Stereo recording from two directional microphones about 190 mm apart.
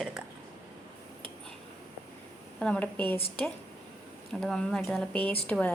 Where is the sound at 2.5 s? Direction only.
5° left (ahead or behind).